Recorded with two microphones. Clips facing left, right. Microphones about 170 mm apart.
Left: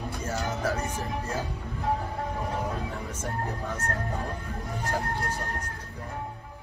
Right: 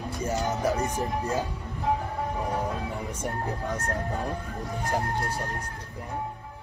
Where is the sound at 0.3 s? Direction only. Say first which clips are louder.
Right 3 dB; 15° right (ahead or behind).